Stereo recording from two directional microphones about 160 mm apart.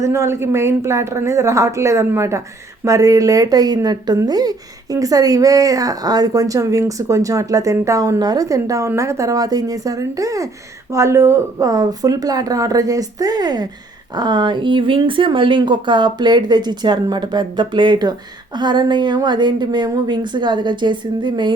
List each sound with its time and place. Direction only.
0.0 s speech: 15° right (ahead or behind)